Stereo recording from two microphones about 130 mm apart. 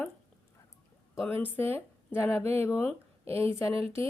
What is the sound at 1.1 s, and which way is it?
Speech, 15° left (ahead or behind).